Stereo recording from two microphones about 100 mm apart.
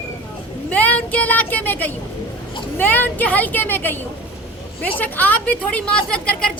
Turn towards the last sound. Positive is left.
turn(degrees=10)  # may be behind; listen again after turning